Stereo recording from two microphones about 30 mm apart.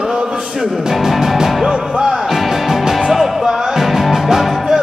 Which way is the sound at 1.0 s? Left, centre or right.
Centre.